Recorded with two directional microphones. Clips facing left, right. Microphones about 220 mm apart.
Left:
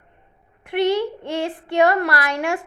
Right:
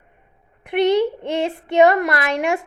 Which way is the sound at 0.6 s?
20° right (ahead or behind).